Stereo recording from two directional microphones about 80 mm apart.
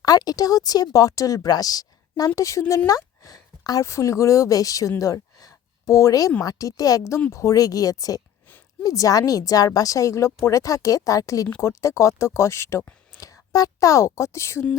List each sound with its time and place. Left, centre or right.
0.0 s a woman's voice: left